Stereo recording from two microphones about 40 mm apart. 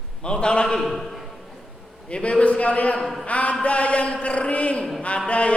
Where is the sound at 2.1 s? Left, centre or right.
Left.